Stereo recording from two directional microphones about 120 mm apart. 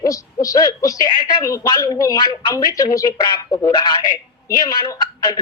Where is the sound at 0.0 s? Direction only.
30° left (ahead or behind).